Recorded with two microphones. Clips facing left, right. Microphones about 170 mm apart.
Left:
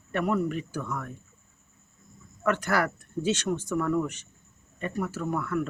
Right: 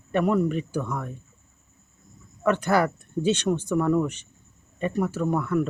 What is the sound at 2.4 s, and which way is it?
Speech, 25° right (ahead or behind).